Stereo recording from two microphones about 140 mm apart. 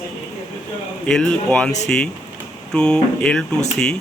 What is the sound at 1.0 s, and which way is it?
Speech, 5° left (ahead or behind).